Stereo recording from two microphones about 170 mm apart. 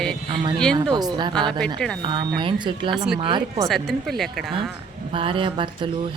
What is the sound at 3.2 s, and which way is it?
Speech, 25° right (ahead or behind).